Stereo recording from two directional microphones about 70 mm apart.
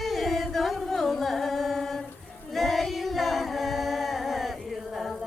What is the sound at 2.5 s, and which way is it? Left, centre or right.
Singing, centre.